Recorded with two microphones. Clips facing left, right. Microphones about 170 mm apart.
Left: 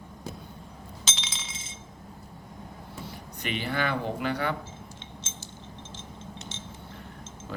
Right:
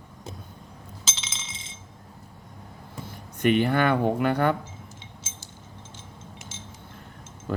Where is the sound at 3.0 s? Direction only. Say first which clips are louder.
Right 13 dB; 50° right (ahead or behind).